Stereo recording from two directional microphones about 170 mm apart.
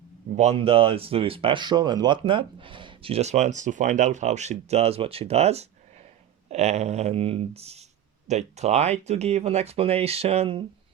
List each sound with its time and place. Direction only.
0.3 s speech: 35° right (ahead or behind)